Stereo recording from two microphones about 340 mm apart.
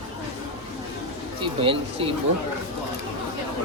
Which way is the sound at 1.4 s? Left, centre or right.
Centre.